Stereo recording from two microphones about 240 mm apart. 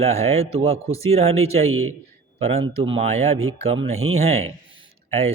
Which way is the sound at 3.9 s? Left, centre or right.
Right.